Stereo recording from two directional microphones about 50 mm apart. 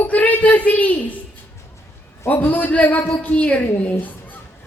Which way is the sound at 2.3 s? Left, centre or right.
Left.